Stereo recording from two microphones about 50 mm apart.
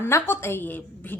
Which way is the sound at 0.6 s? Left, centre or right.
Left.